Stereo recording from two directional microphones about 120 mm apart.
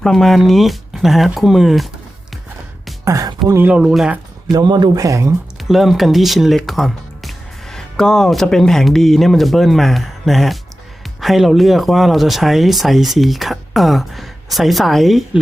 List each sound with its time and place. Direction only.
0.0 s speech: 5° left (ahead or behind)
3.0 s speech: 30° right (ahead or behind)
3.5 s a man's voice: 15° right (ahead or behind)
4.5 s speech: 35° right (ahead or behind)
5.6 s speech: centre (ahead or behind)